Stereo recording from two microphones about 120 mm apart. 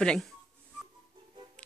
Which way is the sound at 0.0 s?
5° left (ahead or behind).